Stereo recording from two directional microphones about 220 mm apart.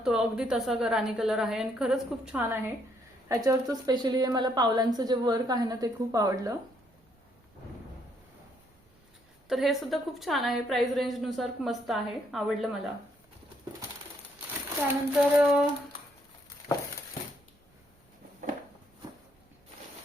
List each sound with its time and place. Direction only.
0.0 s a woman's voice: 5° right (ahead or behind)
9.5 s a woman's voice: centre (ahead or behind)
14.8 s a woman's voice: 5° right (ahead or behind)